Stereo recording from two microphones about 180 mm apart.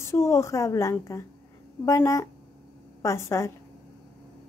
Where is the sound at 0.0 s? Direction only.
15° left (ahead or behind).